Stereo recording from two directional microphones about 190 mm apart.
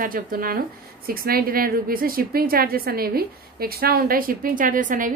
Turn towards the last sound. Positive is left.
turn(degrees=-45)  # may be behind; listen again after turning